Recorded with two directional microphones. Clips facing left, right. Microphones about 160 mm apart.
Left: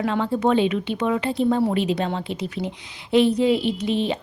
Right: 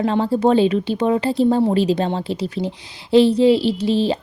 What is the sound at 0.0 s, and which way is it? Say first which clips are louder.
A woman's voice: right 4 dB; 30° right (ahead or behind).